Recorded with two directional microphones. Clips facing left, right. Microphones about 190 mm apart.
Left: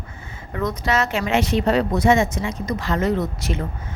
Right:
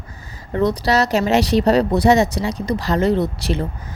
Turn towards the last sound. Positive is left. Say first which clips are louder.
# right 4 dB
turn(degrees=-35)  # may be behind; listen again after turning